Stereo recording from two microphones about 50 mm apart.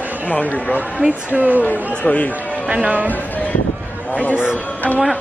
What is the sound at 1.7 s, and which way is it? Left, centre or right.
Speech, left.